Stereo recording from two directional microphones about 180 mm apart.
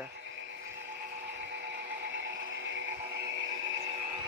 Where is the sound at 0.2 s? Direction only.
90° right.